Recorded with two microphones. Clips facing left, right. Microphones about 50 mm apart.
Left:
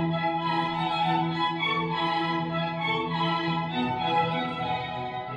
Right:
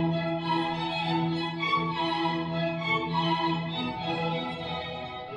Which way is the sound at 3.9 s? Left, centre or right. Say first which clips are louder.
Left 6 dB; centre.